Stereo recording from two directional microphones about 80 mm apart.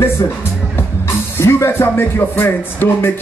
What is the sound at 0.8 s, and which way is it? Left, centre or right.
Music, left.